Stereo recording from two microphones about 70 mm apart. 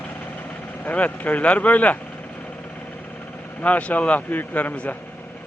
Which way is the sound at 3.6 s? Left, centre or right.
Left.